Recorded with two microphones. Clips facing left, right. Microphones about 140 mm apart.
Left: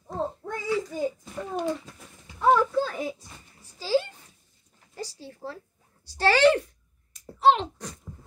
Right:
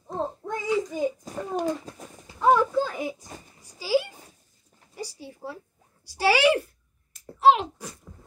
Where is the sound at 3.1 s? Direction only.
45° right (ahead or behind).